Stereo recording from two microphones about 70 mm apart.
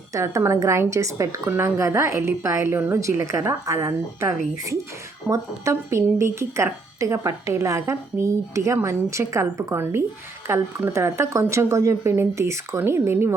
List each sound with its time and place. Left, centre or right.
0.1 s a woman's voice: right
12.8 s speech: right